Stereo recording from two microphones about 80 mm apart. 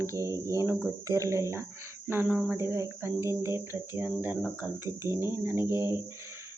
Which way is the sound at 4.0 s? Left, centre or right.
Right.